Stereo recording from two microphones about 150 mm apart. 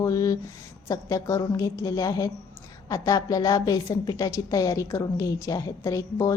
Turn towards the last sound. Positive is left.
turn(degrees=20)  # may be behind; listen again after turning